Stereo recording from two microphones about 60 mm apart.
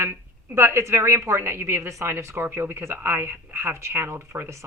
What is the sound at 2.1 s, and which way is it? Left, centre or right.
Speech, right.